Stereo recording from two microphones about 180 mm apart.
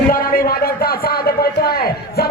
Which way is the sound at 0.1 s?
55° left (ahead or behind).